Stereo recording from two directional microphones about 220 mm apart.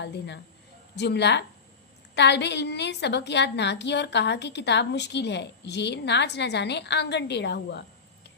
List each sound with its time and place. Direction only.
0.9 s a woman's voice: 50° left (ahead or behind)